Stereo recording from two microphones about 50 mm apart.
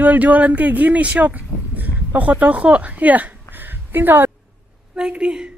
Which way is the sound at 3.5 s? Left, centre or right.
Right.